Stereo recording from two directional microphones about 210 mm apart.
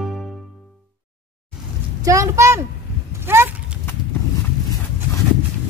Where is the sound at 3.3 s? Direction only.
10° right (ahead or behind).